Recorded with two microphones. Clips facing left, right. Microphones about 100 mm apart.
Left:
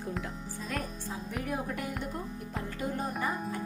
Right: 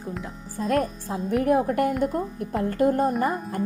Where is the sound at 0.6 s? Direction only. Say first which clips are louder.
Right 14 dB; 50° right (ahead or behind).